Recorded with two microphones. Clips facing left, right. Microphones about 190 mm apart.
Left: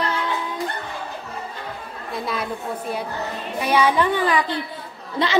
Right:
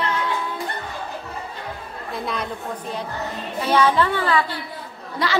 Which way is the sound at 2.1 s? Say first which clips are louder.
Left 1 dB; centre (ahead or behind).